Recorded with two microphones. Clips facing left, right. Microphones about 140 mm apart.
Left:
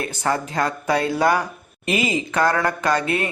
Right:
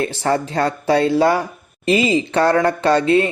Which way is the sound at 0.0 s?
30° right (ahead or behind).